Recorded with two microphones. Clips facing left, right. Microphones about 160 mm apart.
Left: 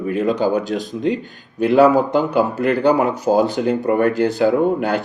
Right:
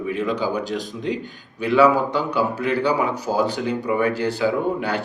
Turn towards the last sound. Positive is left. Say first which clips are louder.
# left 6 dB
turn(degrees=50)  # may be behind; listen again after turning